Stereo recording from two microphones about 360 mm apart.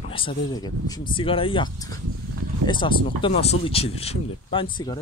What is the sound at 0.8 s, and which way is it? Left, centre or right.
Speech, centre.